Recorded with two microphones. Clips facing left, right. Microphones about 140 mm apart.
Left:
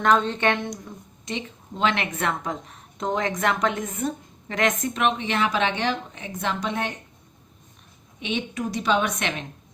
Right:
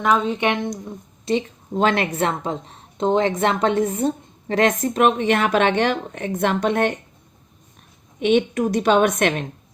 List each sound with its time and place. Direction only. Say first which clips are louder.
0.0 s a woman's voice: right 1 dB; 5° right (ahead or behind)
1.2 s a woman's voice: right 10 dB; 35° right (ahead or behind); by 6.9 s 55° right (ahead or behind)
8.2 s a woman's voice: right 10 dB; 55° right (ahead or behind)